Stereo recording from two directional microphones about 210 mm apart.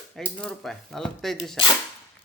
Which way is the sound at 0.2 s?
5° left (ahead or behind).